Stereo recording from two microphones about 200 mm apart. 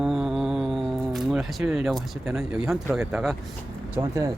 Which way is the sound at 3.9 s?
15° right (ahead or behind).